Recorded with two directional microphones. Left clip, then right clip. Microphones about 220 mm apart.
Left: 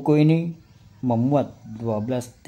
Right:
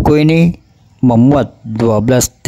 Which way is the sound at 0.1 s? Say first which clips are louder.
Right 5 dB; 50° right (ahead or behind).